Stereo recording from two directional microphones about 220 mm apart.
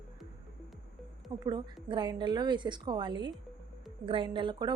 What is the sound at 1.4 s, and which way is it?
Speech, 20° right (ahead or behind).